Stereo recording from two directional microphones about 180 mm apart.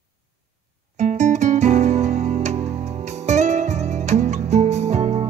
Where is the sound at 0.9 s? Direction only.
40° right (ahead or behind).